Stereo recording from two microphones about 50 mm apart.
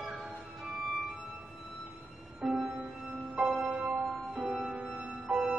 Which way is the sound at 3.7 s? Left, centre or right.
Right.